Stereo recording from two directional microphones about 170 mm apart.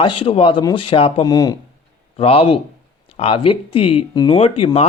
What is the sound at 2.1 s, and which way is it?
Speech, 35° left (ahead or behind).